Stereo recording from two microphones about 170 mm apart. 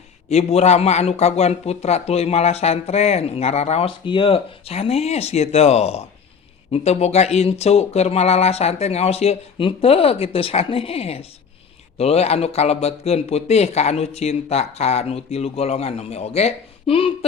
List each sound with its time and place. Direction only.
0.3 s speech: 40° left (ahead or behind)